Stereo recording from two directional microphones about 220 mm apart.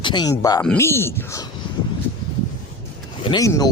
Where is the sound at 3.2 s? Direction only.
20° left (ahead or behind).